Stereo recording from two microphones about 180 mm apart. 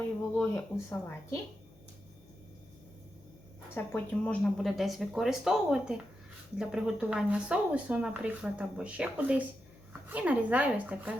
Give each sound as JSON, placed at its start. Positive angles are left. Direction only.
{"t": 0.3, "sound": "speech", "side_deg": 15}
{"t": 3.8, "sound": "speech", "side_deg": 10}